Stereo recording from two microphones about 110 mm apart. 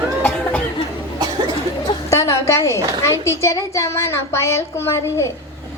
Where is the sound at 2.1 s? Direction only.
25° left (ahead or behind).